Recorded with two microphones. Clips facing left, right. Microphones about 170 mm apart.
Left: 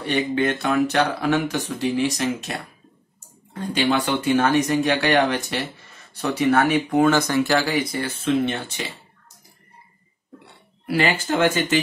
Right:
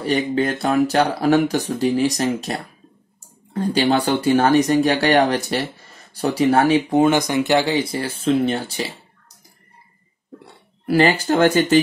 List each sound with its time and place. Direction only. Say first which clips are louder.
0.1 s speech: right 1 dB; 35° right (ahead or behind)
3.5 s speech: right 4 dB; 35° right (ahead or behind)
10.9 s speech: right 5 dB; 40° right (ahead or behind)